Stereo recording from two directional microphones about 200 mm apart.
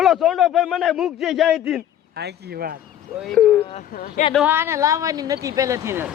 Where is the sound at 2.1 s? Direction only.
55° right (ahead or behind).